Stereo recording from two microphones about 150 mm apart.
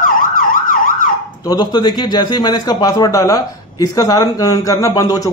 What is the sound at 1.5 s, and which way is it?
A man's voice, 30° left (ahead or behind).